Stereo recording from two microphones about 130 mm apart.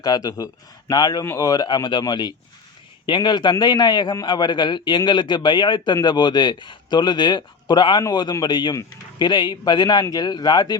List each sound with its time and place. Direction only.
0.0 s a man's voice: 30° left (ahead or behind)